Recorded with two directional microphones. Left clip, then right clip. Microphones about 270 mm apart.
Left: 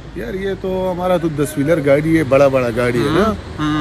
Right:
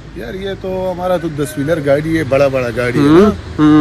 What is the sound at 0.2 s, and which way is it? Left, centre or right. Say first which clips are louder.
Speech: left 1 dB; centre.